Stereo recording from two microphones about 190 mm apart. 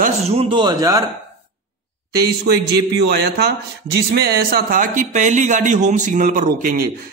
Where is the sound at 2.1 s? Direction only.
55° right (ahead or behind).